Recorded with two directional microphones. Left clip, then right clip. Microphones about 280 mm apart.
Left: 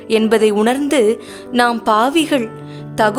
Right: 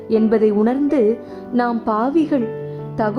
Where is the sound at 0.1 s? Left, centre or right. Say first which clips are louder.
Left 3 dB; left.